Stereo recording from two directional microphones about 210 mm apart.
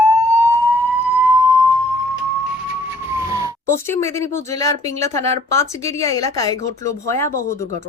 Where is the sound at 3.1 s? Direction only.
15° right (ahead or behind).